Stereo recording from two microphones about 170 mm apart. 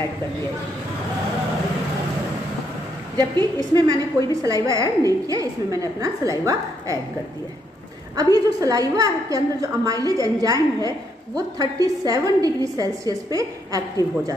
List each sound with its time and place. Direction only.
3.3 s a woman's voice: 25° right (ahead or behind)
8.2 s a woman's voice: 20° right (ahead or behind)